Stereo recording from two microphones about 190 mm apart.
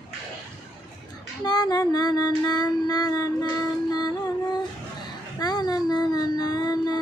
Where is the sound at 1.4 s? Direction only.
20° left (ahead or behind).